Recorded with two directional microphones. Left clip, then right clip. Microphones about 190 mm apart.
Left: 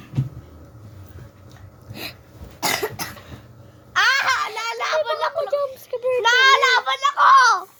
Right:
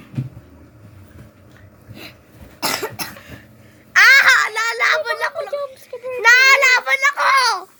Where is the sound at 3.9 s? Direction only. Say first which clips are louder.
Right 8 dB; 60° right (ahead or behind).